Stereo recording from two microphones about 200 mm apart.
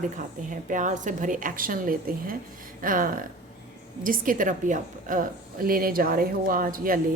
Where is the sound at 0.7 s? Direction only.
40° right (ahead or behind).